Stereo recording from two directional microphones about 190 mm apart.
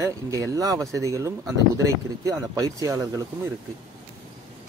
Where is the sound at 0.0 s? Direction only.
15° right (ahead or behind).